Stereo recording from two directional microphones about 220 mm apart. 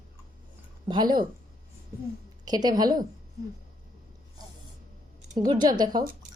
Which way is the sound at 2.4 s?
15° right (ahead or behind).